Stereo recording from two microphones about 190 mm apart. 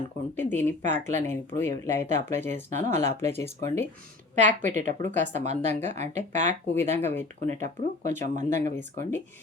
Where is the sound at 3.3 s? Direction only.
15° left (ahead or behind).